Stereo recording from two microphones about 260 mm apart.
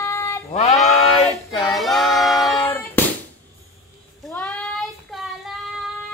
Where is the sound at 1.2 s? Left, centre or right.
Centre.